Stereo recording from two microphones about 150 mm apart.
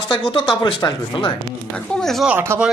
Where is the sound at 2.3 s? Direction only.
15° right (ahead or behind).